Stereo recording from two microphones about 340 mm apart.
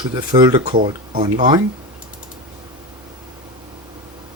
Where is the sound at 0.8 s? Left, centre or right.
Right.